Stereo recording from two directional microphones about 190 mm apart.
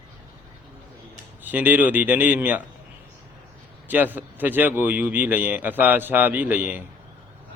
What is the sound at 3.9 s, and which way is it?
Speech, 10° right (ahead or behind).